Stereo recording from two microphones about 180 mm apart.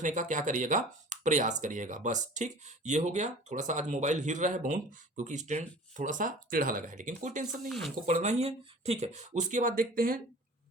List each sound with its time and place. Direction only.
0.0 s speech: 45° right (ahead or behind)
7.7 s speech: centre (ahead or behind)
8.0 s speech: 40° right (ahead or behind)